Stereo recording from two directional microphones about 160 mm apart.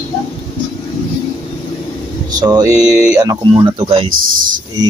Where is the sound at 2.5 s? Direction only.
20° right (ahead or behind).